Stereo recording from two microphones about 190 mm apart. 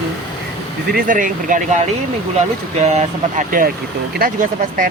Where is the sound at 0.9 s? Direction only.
45° right (ahead or behind).